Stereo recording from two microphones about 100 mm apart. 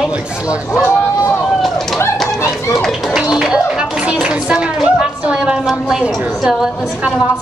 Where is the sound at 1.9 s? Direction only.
30° left (ahead or behind).